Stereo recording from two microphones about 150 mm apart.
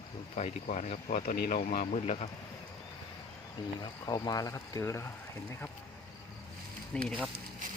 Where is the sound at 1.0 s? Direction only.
70° left (ahead or behind); by 2.2 s 50° left (ahead or behind).